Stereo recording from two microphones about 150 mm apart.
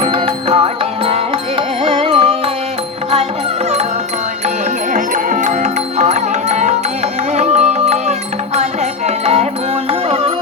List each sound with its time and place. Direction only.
0.0 s music: 40° right (ahead or behind)
4.9 s music: 55° right (ahead or behind)